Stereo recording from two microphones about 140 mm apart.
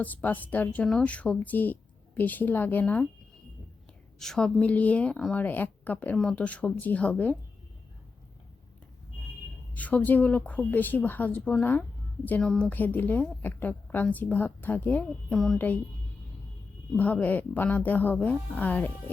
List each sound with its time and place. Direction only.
0.0 s speech: 10° left (ahead or behind)
4.2 s speech: 5° left (ahead or behind)
9.7 s speech: 10° left (ahead or behind)
17.0 s speech: 10° left (ahead or behind)